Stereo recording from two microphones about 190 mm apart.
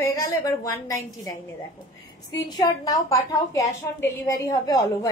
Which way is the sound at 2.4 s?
20° left (ahead or behind).